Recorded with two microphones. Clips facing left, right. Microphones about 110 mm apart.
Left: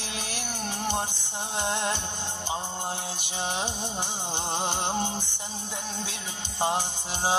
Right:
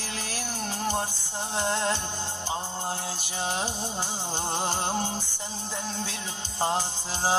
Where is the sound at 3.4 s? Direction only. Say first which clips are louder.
Right 1 dB; 20° left (ahead or behind).